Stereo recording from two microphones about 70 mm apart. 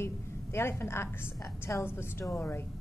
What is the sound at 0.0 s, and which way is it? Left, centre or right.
A woman's voice, left.